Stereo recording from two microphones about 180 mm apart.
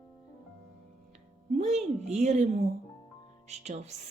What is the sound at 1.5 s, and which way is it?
Speech, 40° right (ahead or behind).